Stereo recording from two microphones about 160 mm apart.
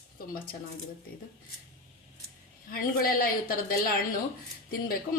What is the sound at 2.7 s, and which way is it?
A woman's voice, 65° left (ahead or behind).